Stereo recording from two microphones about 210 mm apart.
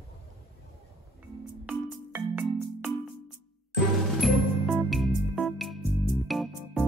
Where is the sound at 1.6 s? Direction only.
10° right (ahead or behind).